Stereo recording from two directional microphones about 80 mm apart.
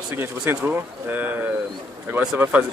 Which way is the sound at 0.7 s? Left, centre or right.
Right.